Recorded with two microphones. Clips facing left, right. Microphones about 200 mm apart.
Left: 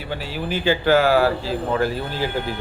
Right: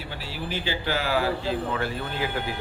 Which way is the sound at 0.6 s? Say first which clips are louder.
Left 13 dB; 50° left (ahead or behind).